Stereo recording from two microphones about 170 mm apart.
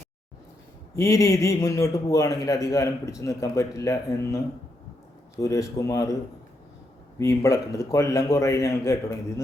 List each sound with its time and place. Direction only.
0.9 s a man's voice: 15° left (ahead or behind)
5.4 s a man's voice: 20° left (ahead or behind)
7.2 s a man's voice: 20° left (ahead or behind)